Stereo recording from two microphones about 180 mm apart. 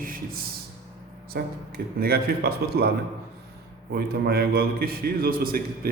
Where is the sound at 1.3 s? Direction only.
60° right (ahead or behind).